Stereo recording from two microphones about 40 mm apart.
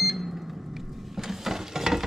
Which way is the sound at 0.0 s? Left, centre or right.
Centre.